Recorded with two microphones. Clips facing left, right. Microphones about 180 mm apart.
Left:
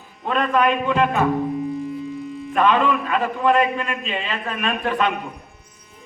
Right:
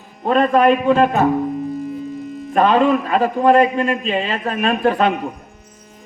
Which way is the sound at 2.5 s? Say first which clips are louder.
Right 4 dB; 40° right (ahead or behind).